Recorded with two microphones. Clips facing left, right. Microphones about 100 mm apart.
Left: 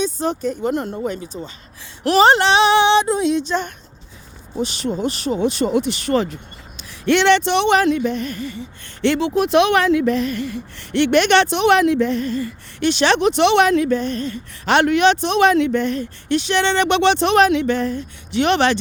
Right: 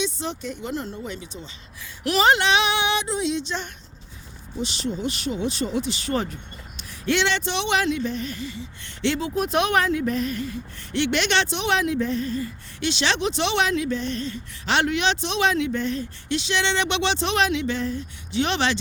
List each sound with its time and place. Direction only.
0.0 s speech: 45° left (ahead or behind)
2.0 s a sound: 35° left (ahead or behind)
3.1 s speech: 50° left (ahead or behind)
5.0 s a sound: 40° left (ahead or behind)
5.4 s speech: 65° left (ahead or behind)
9.1 s speech: 80° left; by 18.8 s 55° left (ahead or behind)